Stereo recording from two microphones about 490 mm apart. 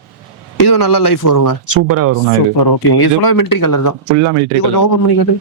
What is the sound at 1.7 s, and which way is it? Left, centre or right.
Speech, right.